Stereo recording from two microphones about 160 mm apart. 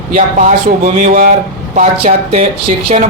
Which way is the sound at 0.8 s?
55° right (ahead or behind).